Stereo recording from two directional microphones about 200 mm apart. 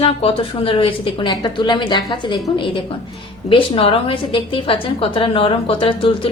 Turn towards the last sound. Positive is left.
turn(degrees=25)  # may be behind; listen again after turning